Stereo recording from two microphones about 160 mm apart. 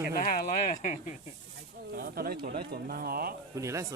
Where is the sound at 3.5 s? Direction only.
20° right (ahead or behind).